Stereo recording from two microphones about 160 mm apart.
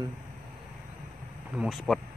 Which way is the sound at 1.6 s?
Centre (ahead or behind).